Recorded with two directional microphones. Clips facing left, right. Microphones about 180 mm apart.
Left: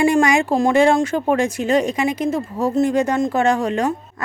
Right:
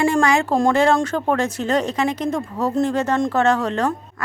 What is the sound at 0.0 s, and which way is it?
Speech, 15° left (ahead or behind).